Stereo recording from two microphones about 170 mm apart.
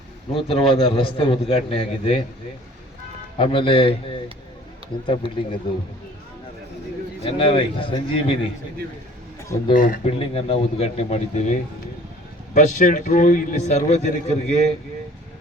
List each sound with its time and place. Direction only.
0.3 s a man's voice: 30° left (ahead or behind)
3.3 s a man's voice: 30° left (ahead or behind)
7.3 s a man's voice: 30° left (ahead or behind)
9.7 s a man's voice: 50° left (ahead or behind)
10.1 s a man's voice: 35° left (ahead or behind)
12.5 s a man's voice: 45° left (ahead or behind)